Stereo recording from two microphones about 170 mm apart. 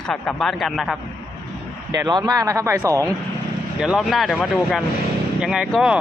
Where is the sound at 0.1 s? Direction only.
5° left (ahead or behind).